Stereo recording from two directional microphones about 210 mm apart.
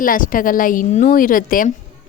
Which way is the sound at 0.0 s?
40° left (ahead or behind).